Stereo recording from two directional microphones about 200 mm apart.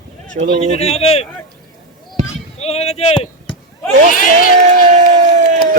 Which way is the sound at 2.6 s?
30° left (ahead or behind).